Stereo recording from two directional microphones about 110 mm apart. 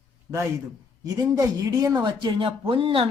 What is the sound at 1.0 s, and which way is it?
Speech, 35° right (ahead or behind).